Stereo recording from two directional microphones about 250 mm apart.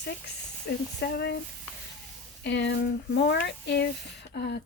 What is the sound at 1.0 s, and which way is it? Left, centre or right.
Speech, left.